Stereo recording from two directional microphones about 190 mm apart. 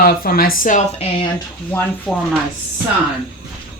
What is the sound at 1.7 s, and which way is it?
Speech, 10° left (ahead or behind).